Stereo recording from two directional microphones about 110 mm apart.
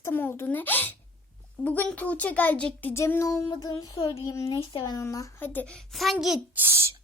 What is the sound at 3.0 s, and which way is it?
Speech, 30° left (ahead or behind).